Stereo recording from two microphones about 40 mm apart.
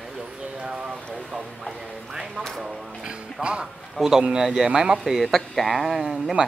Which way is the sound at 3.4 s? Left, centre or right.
Right.